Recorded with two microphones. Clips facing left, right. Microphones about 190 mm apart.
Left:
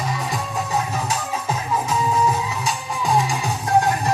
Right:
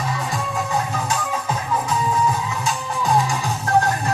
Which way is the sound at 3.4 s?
15° left (ahead or behind).